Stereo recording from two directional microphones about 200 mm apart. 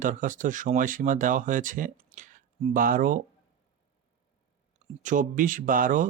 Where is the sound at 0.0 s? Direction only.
40° right (ahead or behind).